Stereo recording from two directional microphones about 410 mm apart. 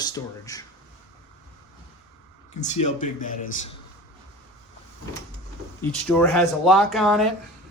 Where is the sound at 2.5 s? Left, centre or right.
Centre.